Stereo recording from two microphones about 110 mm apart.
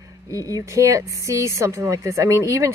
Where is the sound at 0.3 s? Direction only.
30° right (ahead or behind).